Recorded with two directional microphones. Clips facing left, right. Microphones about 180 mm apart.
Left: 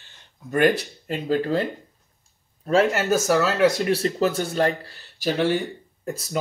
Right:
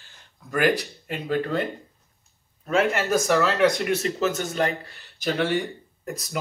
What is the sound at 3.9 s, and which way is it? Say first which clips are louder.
Speech: left 2 dB; 35° left (ahead or behind).